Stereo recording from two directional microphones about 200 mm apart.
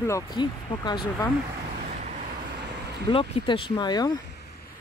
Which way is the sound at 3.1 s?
25° left (ahead or behind).